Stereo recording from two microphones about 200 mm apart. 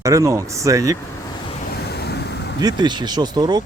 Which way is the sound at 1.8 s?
55° left (ahead or behind).